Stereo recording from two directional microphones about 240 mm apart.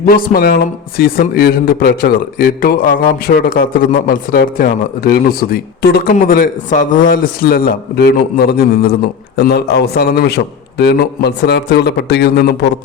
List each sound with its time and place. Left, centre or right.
0.0 s a man's voice: left